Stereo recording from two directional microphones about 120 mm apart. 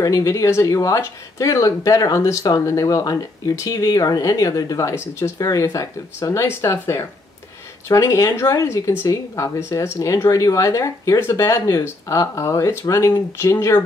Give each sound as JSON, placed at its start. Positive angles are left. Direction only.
{"t": 0.0, "sound": "speech", "side_deg": 25}